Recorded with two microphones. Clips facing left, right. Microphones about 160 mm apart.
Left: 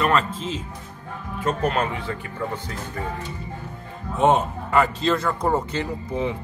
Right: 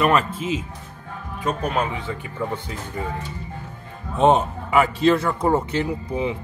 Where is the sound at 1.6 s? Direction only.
Centre (ahead or behind).